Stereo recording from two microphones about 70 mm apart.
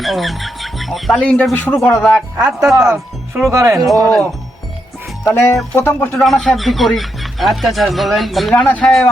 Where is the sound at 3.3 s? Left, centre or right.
Right.